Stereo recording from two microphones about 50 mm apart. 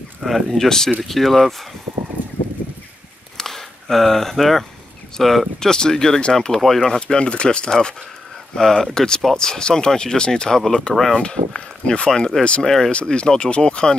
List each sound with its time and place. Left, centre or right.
0.2 s speech: centre
0.7 s speech: centre
2.2 s a sound: right
3.3 s a sound: centre
5.2 s speech: centre
7.0 s speech: centre
12.6 s speech: centre
12.9 s speech: centre